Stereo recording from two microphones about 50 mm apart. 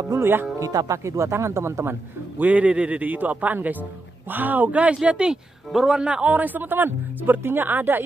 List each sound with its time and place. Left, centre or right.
0.2 s speech: right
0.6 s speech: right
2.3 s a man's voice: right
5.0 s a man's voice: centre; by 8.0 s right